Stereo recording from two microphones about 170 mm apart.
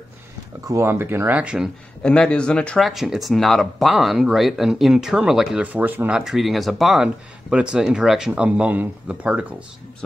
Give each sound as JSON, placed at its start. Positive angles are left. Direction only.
{"t": 0.7, "sound": "speech", "side_deg": -15}
{"t": 2.0, "sound": "speech", "side_deg": 5}